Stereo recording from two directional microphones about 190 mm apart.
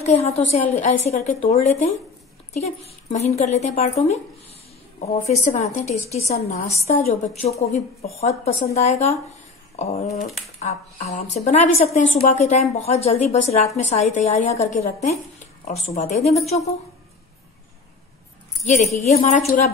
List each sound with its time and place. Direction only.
0.0 s a woman's voice: 35° left (ahead or behind)
19.1 s a woman's voice: 40° left (ahead or behind)